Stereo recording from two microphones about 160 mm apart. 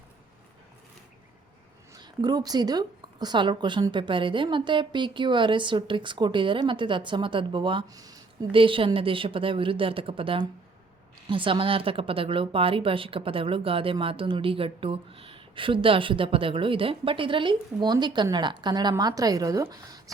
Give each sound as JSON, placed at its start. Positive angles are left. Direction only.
{"t": 1.9, "sound": "a woman's voice", "side_deg": -25}